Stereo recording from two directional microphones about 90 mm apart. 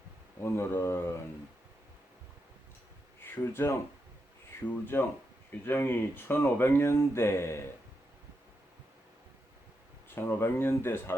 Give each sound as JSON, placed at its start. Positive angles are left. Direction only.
{"t": 0.4, "sound": "speech", "side_deg": 25}
{"t": 3.2, "sound": "speech", "side_deg": 25}
{"t": 10.2, "sound": "speech", "side_deg": 25}